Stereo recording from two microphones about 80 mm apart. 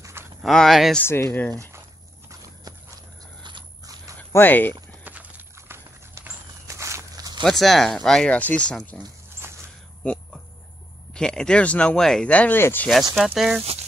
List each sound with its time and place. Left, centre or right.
0.0 s a sound: right
0.4 s speech: centre
1.0 s speech: left
1.5 s speech: right
4.3 s speech: left
5.0 s clip-clop: right
5.6 s clip-clop: right
6.7 s walk: right
7.4 s speech: centre
11.1 s speech: centre
12.5 s speech: left
13.2 s speech: centre